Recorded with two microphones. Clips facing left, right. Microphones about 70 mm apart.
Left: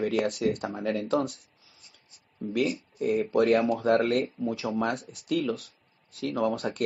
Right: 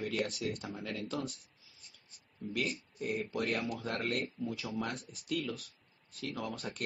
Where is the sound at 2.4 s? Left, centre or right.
Left.